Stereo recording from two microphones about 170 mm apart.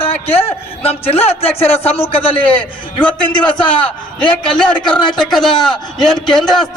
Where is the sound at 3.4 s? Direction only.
5° left (ahead or behind).